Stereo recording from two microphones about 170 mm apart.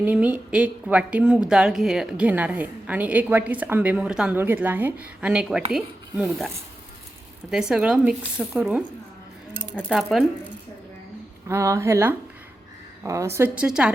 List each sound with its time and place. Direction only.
0.0 s a woman's voice: 10° right (ahead or behind)
7.7 s a woman's voice: 5° right (ahead or behind)
11.4 s a woman's voice: 15° right (ahead or behind)